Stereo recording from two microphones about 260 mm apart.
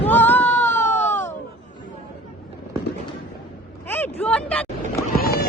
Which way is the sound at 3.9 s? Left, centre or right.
Centre.